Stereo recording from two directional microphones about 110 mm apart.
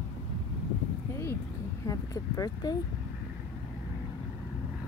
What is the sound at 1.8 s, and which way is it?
Speech, 30° left (ahead or behind).